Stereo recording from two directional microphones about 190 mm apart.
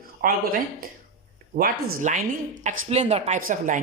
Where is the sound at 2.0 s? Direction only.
40° right (ahead or behind).